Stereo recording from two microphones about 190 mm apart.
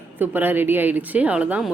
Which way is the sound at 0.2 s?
10° right (ahead or behind).